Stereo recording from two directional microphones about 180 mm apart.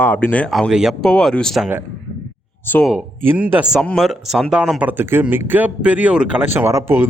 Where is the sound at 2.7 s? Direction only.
10° left (ahead or behind).